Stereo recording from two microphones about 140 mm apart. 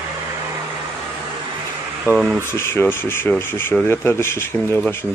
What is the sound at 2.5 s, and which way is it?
Speech, 15° left (ahead or behind).